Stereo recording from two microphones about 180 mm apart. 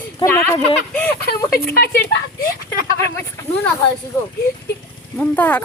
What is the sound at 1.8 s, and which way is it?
Speech, 60° left (ahead or behind).